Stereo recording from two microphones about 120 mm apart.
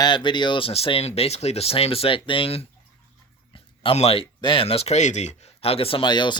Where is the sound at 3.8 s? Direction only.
55° left (ahead or behind).